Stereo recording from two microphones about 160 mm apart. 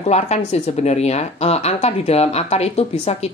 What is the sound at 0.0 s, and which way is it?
Speech, 40° left (ahead or behind).